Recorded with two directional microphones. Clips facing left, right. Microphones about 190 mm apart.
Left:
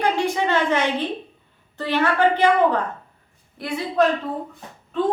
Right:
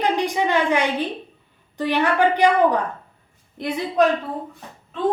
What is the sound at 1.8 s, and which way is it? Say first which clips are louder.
A woman's voice: right 1 dB; 15° right (ahead or behind).